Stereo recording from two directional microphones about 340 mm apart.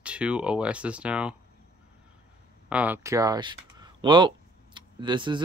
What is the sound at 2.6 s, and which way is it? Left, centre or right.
Speech, centre.